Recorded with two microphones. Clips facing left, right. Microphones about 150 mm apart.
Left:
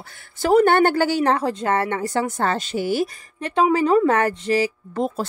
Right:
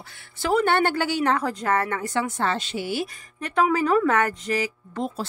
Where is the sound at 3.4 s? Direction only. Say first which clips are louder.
Left 3 dB; 30° left (ahead or behind).